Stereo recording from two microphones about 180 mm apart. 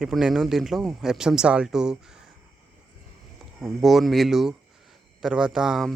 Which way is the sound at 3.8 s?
Centre (ahead or behind).